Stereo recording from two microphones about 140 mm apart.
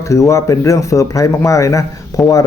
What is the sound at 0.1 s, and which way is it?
A man's voice, 20° left (ahead or behind).